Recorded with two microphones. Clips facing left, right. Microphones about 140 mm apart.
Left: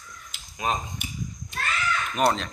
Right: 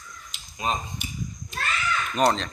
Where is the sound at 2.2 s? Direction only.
5° left (ahead or behind).